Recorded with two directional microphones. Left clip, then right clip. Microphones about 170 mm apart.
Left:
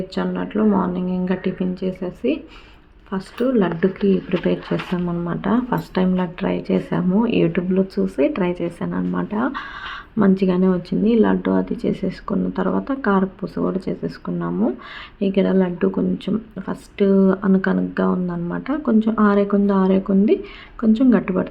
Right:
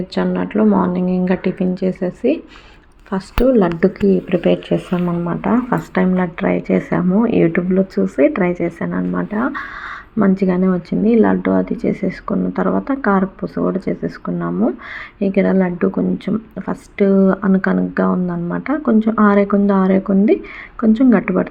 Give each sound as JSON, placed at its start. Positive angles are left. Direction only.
{"t": 0.1, "sound": "speech", "side_deg": -20}